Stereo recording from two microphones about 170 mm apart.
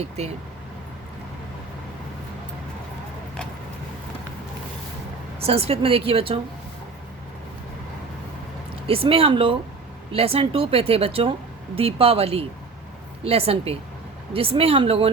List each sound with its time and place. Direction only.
0.2 s speech: 40° right (ahead or behind)
5.4 s speech: 35° right (ahead or behind)
8.9 s speech: 35° right (ahead or behind)